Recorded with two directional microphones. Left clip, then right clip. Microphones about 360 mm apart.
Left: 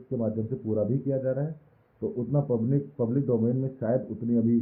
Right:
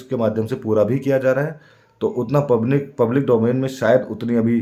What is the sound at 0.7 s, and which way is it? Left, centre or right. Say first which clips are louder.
Speech: right 11 dB; right.